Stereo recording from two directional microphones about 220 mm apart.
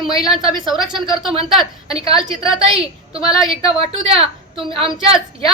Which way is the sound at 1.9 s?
25° right (ahead or behind).